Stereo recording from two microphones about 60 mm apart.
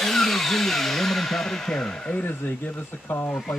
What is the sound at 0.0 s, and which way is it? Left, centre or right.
Speech, centre.